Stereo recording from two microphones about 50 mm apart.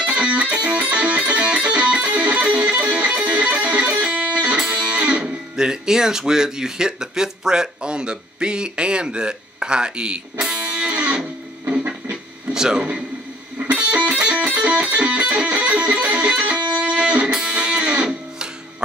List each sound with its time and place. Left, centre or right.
0.0 s music: right
5.6 s speech: centre
10.4 s music: centre
11.8 s a sound: right
12.5 s a man's voice: centre
13.6 s music: right